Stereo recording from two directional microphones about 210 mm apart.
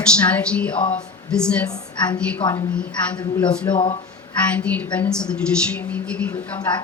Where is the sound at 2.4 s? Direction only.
25° left (ahead or behind).